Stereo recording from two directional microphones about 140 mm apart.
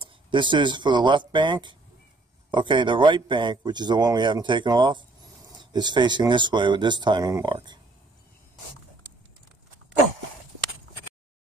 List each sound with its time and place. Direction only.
0.0 s speech: 35° right (ahead or behind)